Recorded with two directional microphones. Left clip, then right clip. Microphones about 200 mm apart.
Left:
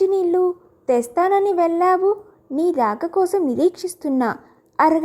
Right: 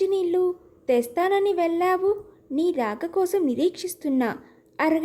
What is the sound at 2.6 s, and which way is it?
Speech, centre (ahead or behind).